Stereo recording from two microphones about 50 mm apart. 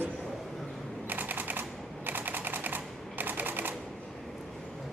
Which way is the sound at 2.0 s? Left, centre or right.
Right.